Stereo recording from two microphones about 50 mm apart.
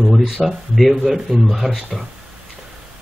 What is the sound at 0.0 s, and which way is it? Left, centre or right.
Speech, centre.